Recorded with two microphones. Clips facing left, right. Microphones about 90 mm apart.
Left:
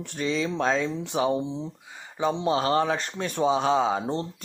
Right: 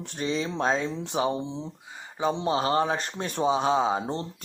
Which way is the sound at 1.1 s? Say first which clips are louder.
Left 1 dB; 30° right (ahead or behind).